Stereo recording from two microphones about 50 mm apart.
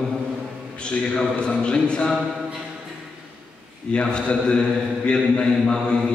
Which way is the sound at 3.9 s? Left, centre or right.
Left.